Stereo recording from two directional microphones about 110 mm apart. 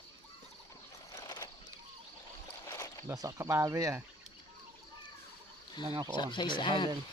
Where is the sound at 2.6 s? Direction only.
30° left (ahead or behind).